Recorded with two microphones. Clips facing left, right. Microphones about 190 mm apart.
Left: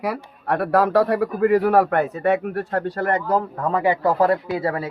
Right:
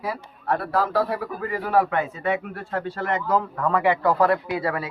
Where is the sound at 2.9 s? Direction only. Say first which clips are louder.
Left 1 dB; 35° left (ahead or behind).